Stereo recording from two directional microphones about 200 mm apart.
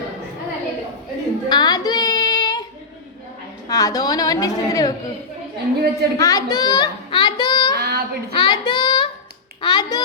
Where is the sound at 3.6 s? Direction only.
15° left (ahead or behind).